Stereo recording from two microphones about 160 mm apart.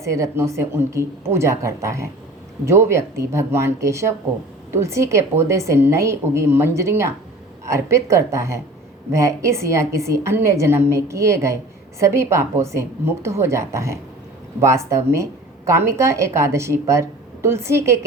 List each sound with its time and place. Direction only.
0.0 s a woman's voice: 20° right (ahead or behind)